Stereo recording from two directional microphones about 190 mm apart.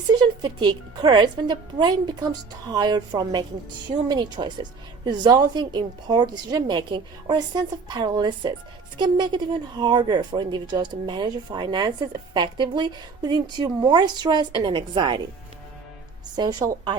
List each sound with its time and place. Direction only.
0.1 s a woman's voice: 20° right (ahead or behind)
16.3 s a woman's voice: 20° right (ahead or behind)